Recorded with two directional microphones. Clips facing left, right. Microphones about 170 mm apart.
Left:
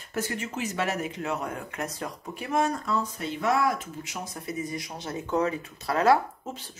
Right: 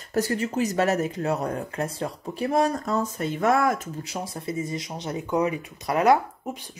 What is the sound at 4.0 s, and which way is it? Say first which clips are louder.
Speech: right 4 dB; 30° right (ahead or behind).